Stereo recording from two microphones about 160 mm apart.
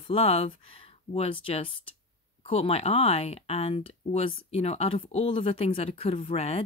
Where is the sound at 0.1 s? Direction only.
40° left (ahead or behind).